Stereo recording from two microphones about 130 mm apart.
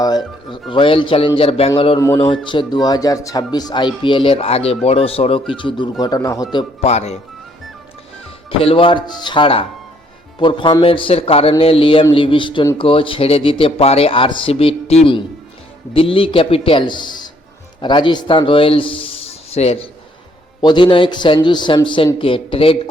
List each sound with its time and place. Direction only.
0.5 s speech: 40° left (ahead or behind)
6.8 s speech: 55° left (ahead or behind)
8.4 s a man's voice: 45° left (ahead or behind)
20.6 s speech: 35° left (ahead or behind)